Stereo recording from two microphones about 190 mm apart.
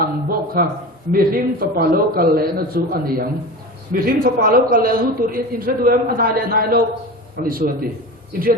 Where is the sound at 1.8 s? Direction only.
50° right (ahead or behind).